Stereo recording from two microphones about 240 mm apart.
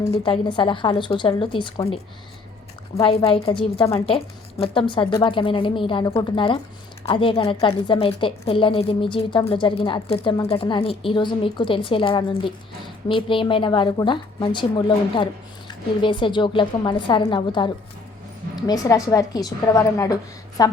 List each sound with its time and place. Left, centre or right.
0.1 s a woman's voice: left
3.0 s a woman's voice: left
3.8 s a woman's voice: centre
4.0 s a woman's voice: left